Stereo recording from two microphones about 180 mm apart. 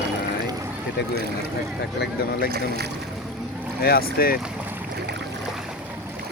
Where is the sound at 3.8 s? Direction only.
55° left (ahead or behind).